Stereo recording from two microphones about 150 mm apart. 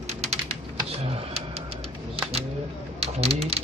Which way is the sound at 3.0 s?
45° right (ahead or behind).